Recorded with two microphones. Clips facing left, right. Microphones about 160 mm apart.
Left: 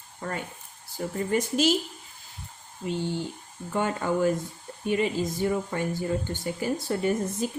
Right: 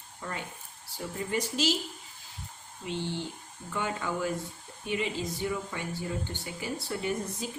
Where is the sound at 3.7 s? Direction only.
45° left (ahead or behind).